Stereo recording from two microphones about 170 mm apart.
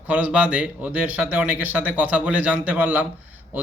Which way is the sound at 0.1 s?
10° right (ahead or behind).